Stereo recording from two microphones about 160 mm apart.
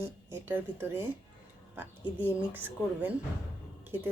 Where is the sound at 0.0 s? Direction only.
15° right (ahead or behind).